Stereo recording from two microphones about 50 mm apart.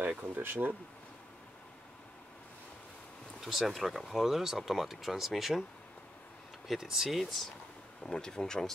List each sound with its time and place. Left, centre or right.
0.2 s speech: right
3.3 s speech: centre
6.7 s speech: centre
7.2 s speech: centre
8.0 s speech: centre